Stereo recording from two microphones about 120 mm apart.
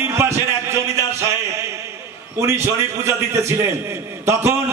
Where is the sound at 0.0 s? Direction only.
20° right (ahead or behind).